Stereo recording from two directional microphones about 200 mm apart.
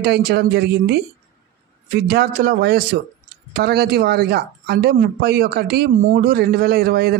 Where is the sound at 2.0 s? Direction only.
50° right (ahead or behind).